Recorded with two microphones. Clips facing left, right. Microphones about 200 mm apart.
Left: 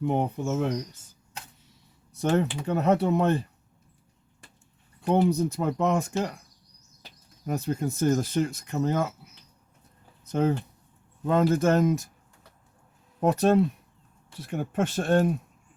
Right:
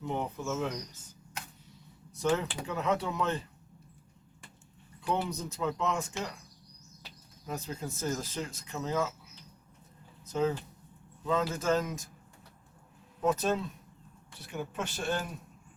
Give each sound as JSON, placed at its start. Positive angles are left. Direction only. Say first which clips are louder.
{"t": 0.0, "sound": "speech", "louder": "left 8 dB", "side_deg": 55}
{"t": 2.1, "sound": "speech", "louder": "left 5 dB", "side_deg": 65}
{"t": 5.0, "sound": "speech", "louder": "left 10 dB", "side_deg": 55}
{"t": 5.4, "sound": "speech", "louder": "left 7 dB", "side_deg": 65}
{"t": 10.3, "sound": "speech", "louder": "left 5 dB", "side_deg": 65}
{"t": 13.1, "sound": "speech", "louder": "left 8 dB", "side_deg": 60}